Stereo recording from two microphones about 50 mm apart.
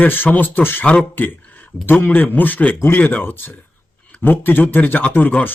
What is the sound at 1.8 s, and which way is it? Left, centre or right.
A man's voice, left.